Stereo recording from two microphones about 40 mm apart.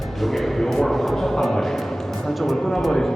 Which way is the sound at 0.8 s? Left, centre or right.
Centre.